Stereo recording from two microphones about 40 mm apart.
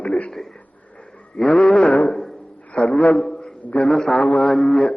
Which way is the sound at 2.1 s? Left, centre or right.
Centre.